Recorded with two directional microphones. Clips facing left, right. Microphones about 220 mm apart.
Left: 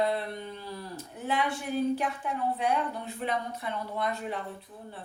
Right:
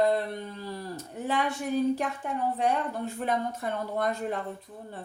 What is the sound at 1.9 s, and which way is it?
Speech, 40° right (ahead or behind).